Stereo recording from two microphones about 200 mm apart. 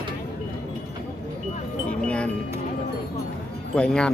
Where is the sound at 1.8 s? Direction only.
5° left (ahead or behind).